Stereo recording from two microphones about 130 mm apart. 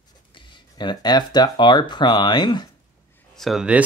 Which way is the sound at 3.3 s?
Centre (ahead or behind).